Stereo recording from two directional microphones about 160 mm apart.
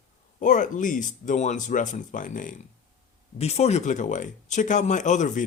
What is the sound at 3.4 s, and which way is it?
Speech, 45° left (ahead or behind).